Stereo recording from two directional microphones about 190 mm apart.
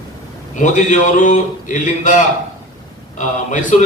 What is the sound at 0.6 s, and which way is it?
A man's voice, 40° left (ahead or behind).